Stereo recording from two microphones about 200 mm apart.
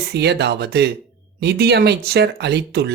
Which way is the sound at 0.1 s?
55° right (ahead or behind).